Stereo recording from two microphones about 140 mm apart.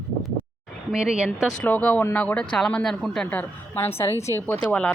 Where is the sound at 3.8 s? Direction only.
20° left (ahead or behind).